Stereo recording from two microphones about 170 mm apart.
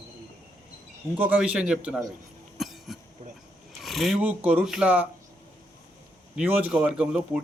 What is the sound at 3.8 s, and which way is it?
Speech, centre (ahead or behind).